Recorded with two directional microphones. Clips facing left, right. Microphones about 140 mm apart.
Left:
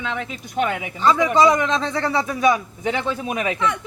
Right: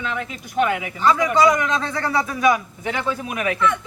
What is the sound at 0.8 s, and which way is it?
A man's voice, 25° left (ahead or behind).